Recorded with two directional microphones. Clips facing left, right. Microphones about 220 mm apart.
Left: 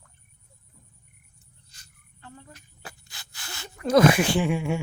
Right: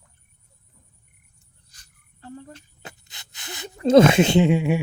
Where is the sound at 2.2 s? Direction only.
45° right (ahead or behind).